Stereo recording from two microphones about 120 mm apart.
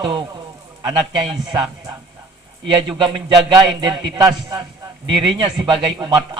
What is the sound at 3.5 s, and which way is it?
A man's voice, 35° right (ahead or behind).